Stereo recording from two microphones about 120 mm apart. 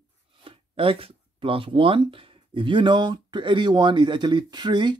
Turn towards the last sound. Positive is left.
turn(degrees=-40)  # may be behind; listen again after turning